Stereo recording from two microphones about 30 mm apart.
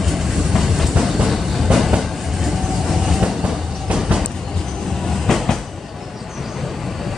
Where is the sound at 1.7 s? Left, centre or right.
Right.